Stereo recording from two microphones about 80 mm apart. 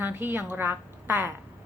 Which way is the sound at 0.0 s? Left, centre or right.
Right.